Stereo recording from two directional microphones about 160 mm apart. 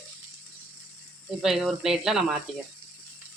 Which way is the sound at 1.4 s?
5° right (ahead or behind).